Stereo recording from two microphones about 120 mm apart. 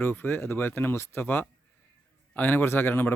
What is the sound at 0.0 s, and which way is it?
Speech, 15° left (ahead or behind).